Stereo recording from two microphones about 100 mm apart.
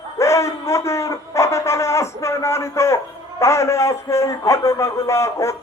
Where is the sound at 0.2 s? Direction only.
30° left (ahead or behind).